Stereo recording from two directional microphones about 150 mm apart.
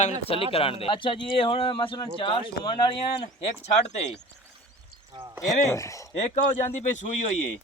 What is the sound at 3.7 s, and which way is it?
Speech, 45° left (ahead or behind).